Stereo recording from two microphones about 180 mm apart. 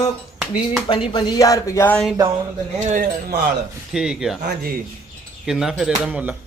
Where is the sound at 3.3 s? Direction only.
65° right (ahead or behind).